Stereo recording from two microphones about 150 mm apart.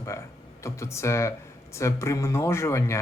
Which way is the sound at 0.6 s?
20° left (ahead or behind).